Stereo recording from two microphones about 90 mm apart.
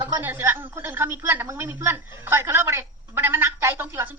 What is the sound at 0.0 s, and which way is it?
A woman's voice, 25° right (ahead or behind).